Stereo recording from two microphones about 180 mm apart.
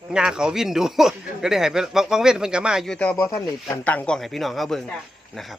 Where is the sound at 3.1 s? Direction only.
15° left (ahead or behind).